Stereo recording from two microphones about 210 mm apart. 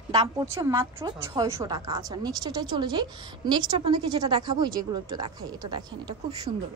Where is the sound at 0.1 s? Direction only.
15° right (ahead or behind).